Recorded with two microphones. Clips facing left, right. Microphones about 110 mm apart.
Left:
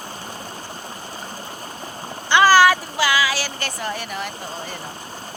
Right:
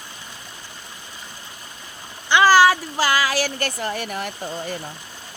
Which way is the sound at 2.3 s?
20° right (ahead or behind).